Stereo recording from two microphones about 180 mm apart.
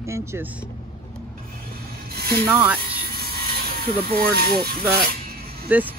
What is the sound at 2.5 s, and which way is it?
Speech, 5° right (ahead or behind).